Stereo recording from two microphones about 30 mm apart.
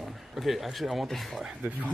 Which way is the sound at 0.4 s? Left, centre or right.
Centre.